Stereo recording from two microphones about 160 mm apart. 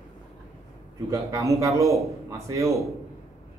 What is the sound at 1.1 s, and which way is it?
Speech, 20° right (ahead or behind).